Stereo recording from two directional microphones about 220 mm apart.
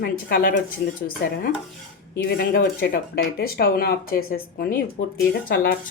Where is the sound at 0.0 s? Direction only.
40° left (ahead or behind).